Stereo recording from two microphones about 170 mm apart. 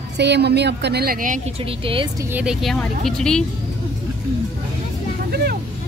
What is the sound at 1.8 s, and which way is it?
Speech, 30° right (ahead or behind).